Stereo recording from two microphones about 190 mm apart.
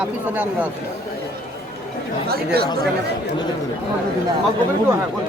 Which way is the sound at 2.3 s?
55° right (ahead or behind).